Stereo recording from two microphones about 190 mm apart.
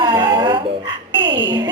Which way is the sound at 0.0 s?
25° right (ahead or behind).